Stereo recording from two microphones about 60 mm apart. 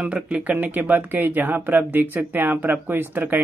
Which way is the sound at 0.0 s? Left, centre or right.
Right.